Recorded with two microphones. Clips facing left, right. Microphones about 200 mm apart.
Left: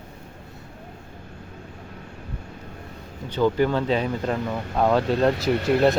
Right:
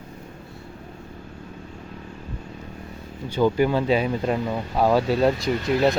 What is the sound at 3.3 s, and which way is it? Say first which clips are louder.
Speech: right 1 dB; 10° right (ahead or behind).